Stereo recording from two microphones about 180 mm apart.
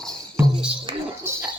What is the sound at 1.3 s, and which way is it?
Rodents, 15° right (ahead or behind).